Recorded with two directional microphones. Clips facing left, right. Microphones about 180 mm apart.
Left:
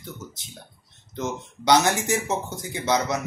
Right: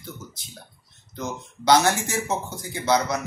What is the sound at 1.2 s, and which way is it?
Speech, 20° left (ahead or behind).